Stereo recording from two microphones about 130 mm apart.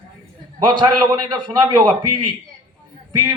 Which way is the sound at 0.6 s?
35° right (ahead or behind).